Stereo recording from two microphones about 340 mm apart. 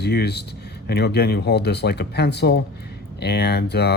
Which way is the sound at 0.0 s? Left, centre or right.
Left.